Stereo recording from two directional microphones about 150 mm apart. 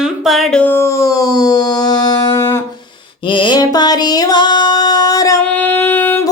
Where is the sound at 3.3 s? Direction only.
30° left (ahead or behind).